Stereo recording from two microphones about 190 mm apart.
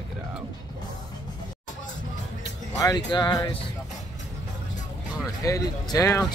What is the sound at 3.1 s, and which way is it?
Speech, 20° left (ahead or behind).